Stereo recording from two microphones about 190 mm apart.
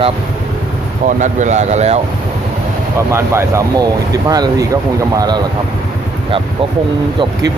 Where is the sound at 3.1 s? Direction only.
15° right (ahead or behind).